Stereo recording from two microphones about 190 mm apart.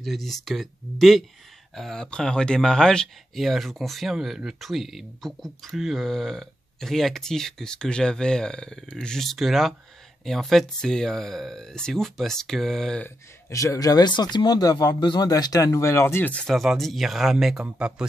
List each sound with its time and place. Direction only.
0.0 s speech: centre (ahead or behind)
13.5 s speech: 15° left (ahead or behind); by 18.0 s 5° right (ahead or behind)